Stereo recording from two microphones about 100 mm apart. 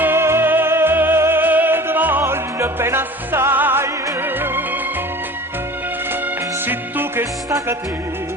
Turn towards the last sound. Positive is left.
turn(degrees=-20)  # may be behind; listen again after turning